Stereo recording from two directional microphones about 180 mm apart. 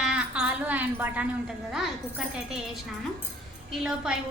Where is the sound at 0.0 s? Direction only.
5° right (ahead or behind).